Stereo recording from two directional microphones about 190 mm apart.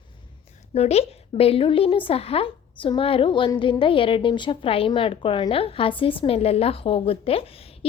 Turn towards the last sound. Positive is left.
turn(degrees=30)  # may be behind; listen again after turning